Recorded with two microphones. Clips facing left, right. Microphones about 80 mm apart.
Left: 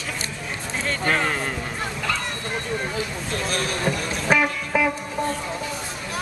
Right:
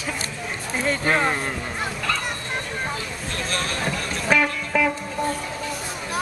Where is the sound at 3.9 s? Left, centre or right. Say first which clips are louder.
Left 1 dB; centre.